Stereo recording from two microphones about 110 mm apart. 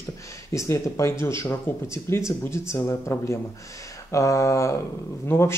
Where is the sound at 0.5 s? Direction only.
25° left (ahead or behind).